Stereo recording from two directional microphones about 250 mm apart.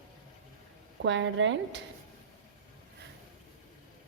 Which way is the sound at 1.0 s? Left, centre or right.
Right.